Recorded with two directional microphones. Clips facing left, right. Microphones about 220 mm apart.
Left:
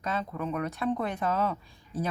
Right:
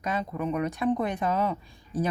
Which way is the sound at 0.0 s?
15° right (ahead or behind).